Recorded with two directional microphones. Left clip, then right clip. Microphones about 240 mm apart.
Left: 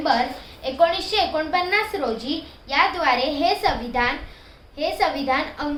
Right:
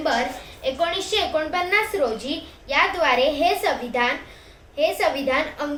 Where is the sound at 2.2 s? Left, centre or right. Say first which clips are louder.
Even; centre.